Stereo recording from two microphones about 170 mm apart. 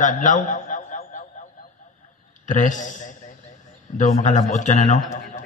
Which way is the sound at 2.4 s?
50° left (ahead or behind).